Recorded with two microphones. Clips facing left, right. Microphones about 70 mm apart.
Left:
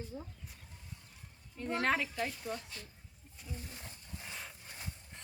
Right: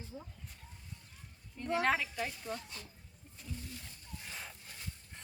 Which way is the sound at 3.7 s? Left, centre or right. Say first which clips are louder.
Even; left.